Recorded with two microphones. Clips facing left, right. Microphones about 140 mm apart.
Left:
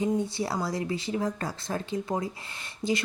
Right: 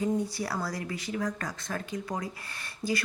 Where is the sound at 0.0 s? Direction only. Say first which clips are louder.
Left 2 dB; 25° left (ahead or behind).